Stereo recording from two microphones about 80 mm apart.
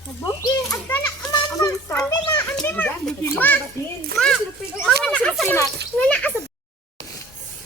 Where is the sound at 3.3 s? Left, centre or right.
Left.